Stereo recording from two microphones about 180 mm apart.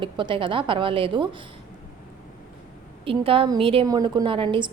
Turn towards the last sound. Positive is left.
turn(degrees=-25)  # may be behind; listen again after turning